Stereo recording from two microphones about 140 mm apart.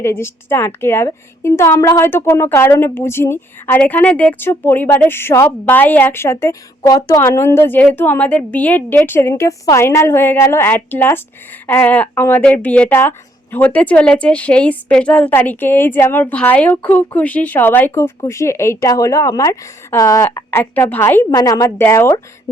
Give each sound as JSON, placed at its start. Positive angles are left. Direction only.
{"t": 0.0, "sound": "a woman's voice", "side_deg": 15}
{"t": 21.2, "sound": "a woman's voice", "side_deg": 25}